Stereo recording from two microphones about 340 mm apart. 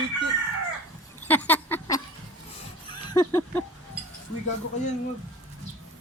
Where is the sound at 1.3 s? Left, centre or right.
Centre.